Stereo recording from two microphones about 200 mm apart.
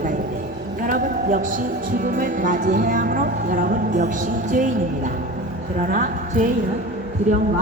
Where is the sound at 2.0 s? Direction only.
40° right (ahead or behind).